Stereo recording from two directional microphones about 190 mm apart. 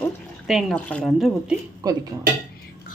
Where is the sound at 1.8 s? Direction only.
20° right (ahead or behind).